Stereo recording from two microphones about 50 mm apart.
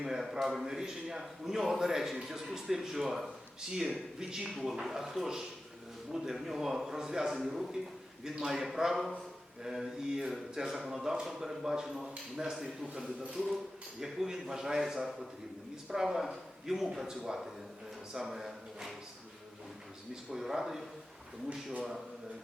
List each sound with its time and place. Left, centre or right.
0.0 s a man's voice: centre
14.0 s speech: centre
20.3 s a man's voice: centre